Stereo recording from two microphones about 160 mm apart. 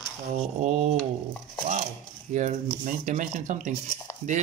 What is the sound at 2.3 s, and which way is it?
Speech, 50° right (ahead or behind).